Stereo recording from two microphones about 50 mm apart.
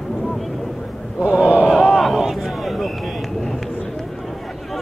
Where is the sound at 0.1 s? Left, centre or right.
Centre.